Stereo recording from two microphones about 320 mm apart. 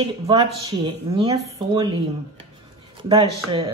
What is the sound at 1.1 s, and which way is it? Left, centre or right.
Speech, centre.